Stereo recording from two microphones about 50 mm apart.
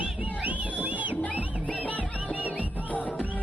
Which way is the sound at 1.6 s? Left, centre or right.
Left.